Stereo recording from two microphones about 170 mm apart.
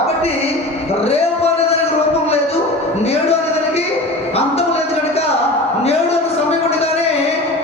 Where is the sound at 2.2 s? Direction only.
35° left (ahead or behind).